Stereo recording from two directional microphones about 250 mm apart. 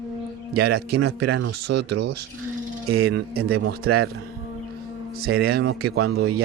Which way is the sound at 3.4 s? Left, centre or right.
Right.